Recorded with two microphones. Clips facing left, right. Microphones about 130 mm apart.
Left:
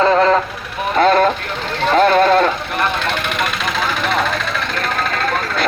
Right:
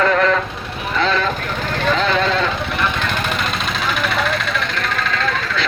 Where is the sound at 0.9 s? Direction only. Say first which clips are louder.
Left 7 dB; 50° left (ahead or behind).